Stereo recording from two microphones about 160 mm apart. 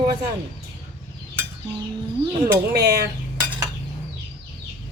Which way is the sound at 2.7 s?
90° right.